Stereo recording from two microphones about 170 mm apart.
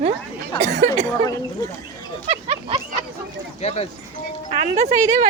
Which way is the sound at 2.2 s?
35° right (ahead or behind).